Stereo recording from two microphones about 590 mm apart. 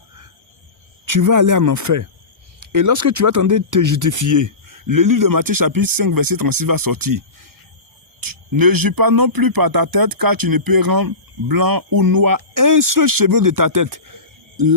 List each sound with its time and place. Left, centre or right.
1.0 s speech: right